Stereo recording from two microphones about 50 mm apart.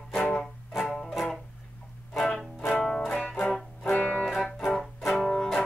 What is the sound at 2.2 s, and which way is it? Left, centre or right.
Music, centre.